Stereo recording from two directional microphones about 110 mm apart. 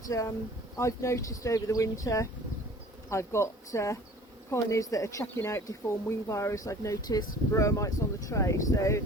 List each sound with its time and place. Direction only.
0.1 s speech: 30° left (ahead or behind)
5.2 s speech: 20° left (ahead or behind)